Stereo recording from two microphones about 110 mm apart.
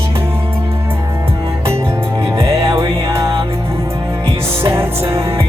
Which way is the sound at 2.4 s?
25° right (ahead or behind).